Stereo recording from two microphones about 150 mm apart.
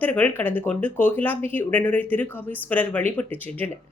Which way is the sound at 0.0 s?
10° left (ahead or behind).